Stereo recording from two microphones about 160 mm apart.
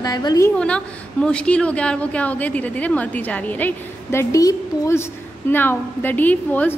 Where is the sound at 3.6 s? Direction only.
15° left (ahead or behind).